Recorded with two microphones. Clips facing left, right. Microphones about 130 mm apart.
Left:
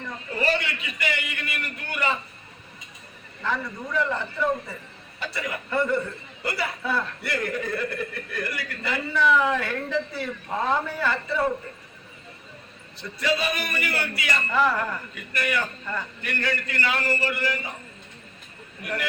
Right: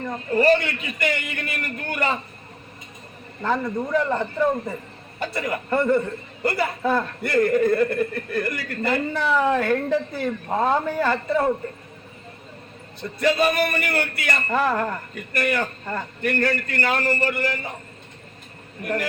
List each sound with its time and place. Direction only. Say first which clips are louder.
0.0 s a man's voice: right 8 dB; 45° right (ahead or behind)
3.4 s a man's voice: right 6 dB; 50° right (ahead or behind)
13.0 s a man's voice: right 6 dB; 50° right (ahead or behind)
18.8 s a man's voice: right 6 dB; 45° right (ahead or behind)